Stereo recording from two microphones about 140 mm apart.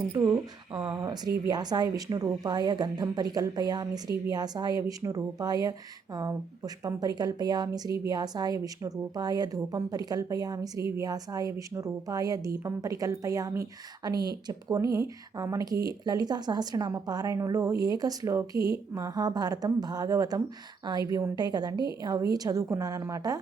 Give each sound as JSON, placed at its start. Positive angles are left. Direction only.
{"t": 0.1, "sound": "speech", "side_deg": -25}
{"t": 0.7, "sound": "speech", "side_deg": -10}
{"t": 1.0, "sound": "speech", "side_deg": -30}